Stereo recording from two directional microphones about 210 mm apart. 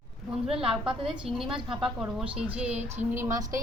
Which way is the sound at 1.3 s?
30° right (ahead or behind).